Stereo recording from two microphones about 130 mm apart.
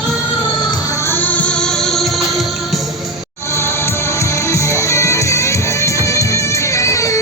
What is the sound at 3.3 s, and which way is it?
Music, 20° left (ahead or behind).